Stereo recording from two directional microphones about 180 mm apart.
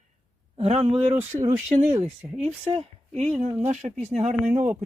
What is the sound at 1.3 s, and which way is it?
Speech, 15° right (ahead or behind).